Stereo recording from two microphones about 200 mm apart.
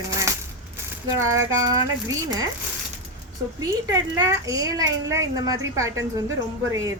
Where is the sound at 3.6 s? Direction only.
20° right (ahead or behind).